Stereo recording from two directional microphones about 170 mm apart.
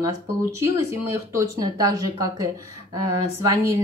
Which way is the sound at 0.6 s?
15° right (ahead or behind).